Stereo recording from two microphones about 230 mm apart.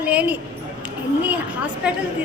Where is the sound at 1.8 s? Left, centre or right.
Centre.